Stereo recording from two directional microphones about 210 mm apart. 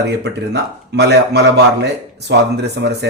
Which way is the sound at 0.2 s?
55° right (ahead or behind).